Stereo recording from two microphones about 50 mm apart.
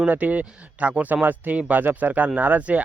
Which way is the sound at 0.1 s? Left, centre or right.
Right.